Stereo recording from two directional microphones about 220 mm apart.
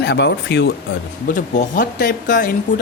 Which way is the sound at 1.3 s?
35° left (ahead or behind).